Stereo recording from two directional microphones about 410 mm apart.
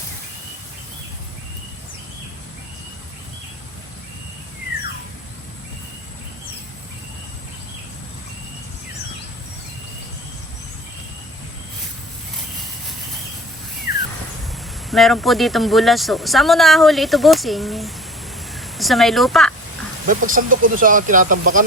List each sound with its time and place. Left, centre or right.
14.8 s speech: centre
20.1 s speech: centre